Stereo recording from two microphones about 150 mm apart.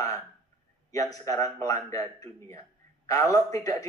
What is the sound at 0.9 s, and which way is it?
Speech, 25° left (ahead or behind).